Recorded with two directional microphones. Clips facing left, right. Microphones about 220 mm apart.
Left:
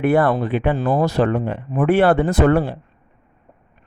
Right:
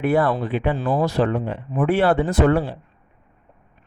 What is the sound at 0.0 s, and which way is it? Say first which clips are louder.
Speech: left 3 dB; 50° left (ahead or behind).